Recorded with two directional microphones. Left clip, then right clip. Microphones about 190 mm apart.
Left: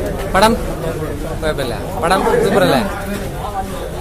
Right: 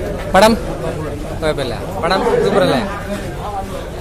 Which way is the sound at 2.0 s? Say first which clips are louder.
Left 1 dB; centre (ahead or behind).